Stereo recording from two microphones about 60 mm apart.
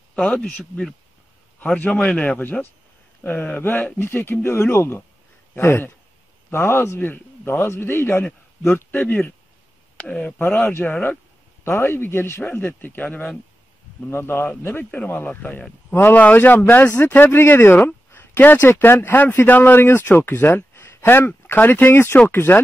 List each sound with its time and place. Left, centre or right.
0.1 s speech: centre
0.6 s speech: centre
2.1 s speech: left
9.9 s speech: centre
10.9 s speech: left
11.6 s speech: left
12.4 s speech: left
14.1 s speech: left
15.0 s speech: left